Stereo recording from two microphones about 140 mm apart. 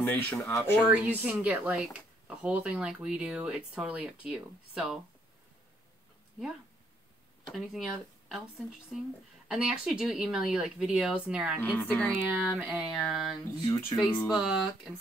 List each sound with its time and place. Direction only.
0.0 s speech: 15° left (ahead or behind)
0.8 s speech: 10° right (ahead or behind)
7.5 s speech: 5° right (ahead or behind)
11.8 s speech: 15° left (ahead or behind)
12.2 s speech: 10° right (ahead or behind)
12.9 s speech: centre (ahead or behind)
13.7 s speech: 15° left (ahead or behind)
14.2 s speech: centre (ahead or behind)